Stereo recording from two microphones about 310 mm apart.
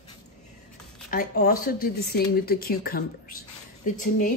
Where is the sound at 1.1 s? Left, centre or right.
Left.